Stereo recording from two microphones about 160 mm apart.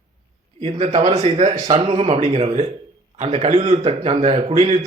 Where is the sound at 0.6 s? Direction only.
40° right (ahead or behind).